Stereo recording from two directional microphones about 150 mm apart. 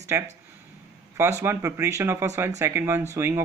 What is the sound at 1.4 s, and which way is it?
Speech, 15° right (ahead or behind).